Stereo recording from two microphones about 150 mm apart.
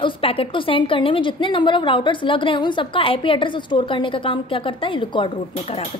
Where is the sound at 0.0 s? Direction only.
40° left (ahead or behind).